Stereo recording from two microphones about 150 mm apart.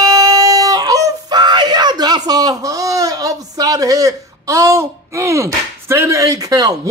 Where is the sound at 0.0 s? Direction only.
25° right (ahead or behind).